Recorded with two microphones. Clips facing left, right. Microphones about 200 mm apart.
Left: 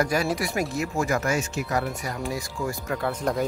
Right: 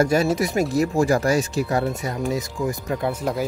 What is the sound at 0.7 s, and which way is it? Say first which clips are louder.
Speech: right 9 dB; 35° right (ahead or behind).